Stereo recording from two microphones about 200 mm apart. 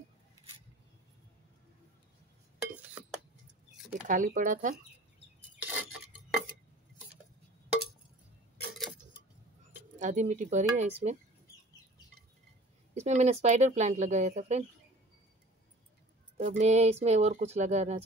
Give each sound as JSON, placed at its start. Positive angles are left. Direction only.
{"t": 2.6, "sound": "chink", "side_deg": -5}
{"t": 4.1, "sound": "speech", "side_deg": -40}
{"t": 5.6, "sound": "dishes", "side_deg": -10}
{"t": 9.9, "sound": "speech", "side_deg": -40}
{"t": 13.0, "sound": "speech", "side_deg": -35}
{"t": 16.3, "sound": "speech", "side_deg": -35}